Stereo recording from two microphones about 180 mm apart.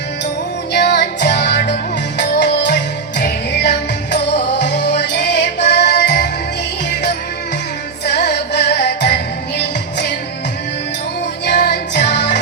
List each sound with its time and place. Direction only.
0.7 s music: 70° left (ahead or behind)
8.0 s music: 70° left (ahead or behind)
11.4 s music: 70° left (ahead or behind)